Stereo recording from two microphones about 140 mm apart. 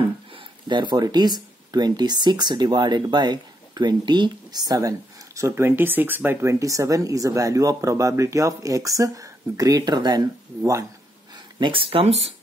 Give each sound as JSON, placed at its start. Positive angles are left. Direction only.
{"t": 0.7, "sound": "speech", "side_deg": -35}
{"t": 11.6, "sound": "speech", "side_deg": -40}